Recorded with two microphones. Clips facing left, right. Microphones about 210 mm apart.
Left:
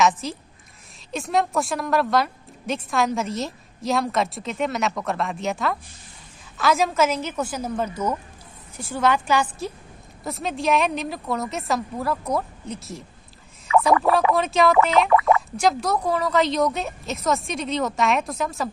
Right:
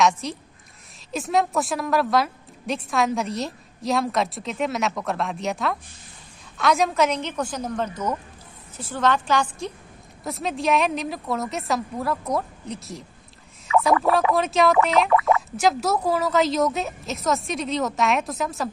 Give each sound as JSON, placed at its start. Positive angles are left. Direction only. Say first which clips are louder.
{"t": 0.0, "sound": "a woman's voice", "louder": "even", "side_deg": 0}